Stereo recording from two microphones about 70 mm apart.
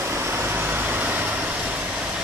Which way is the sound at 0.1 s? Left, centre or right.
Right.